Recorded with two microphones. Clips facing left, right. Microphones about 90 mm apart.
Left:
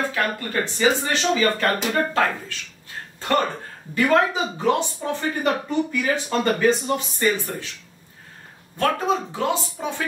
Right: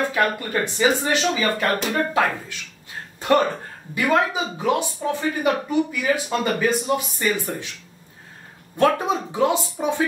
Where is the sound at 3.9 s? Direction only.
10° right (ahead or behind).